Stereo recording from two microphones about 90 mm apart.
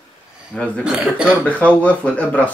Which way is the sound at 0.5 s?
15° left (ahead or behind).